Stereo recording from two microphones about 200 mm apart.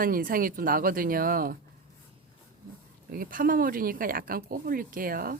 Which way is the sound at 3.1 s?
45° right (ahead or behind).